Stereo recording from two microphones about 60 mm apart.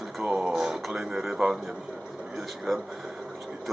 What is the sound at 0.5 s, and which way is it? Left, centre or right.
A man's voice, centre.